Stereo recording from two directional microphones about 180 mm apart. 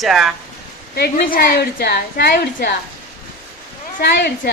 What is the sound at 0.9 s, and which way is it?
A woman's voice, 55° left (ahead or behind).